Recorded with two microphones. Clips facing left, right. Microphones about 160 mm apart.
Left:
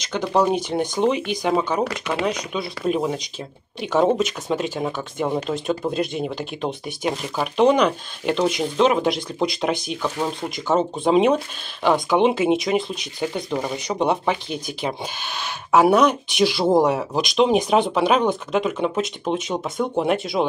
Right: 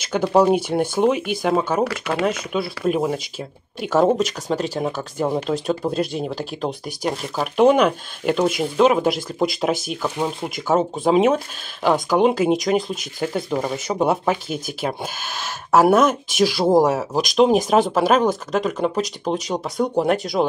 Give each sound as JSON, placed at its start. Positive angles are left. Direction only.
{"t": 0.0, "sound": "speech", "side_deg": -10}
{"t": 17.1, "sound": "speech", "side_deg": -45}
{"t": 17.4, "sound": "speech", "side_deg": 0}
{"t": 20.0, "sound": "speech", "side_deg": 0}